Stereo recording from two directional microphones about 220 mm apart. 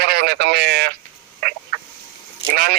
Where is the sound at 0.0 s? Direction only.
45° right (ahead or behind).